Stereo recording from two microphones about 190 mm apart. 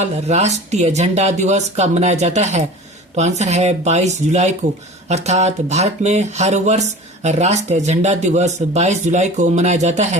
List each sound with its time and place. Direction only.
0.0 s speech: 35° right (ahead or behind)